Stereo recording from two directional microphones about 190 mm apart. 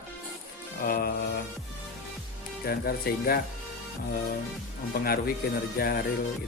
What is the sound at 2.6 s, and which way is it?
Speech, 55° left (ahead or behind).